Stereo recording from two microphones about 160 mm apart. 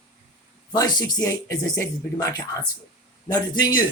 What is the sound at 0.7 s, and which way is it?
Speech, 25° left (ahead or behind).